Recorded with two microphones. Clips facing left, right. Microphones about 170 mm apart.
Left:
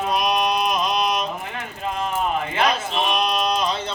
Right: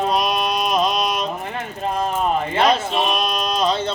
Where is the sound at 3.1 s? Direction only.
30° right (ahead or behind).